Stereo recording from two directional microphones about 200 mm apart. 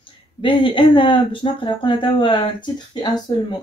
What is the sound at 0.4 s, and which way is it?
Speech, 25° left (ahead or behind).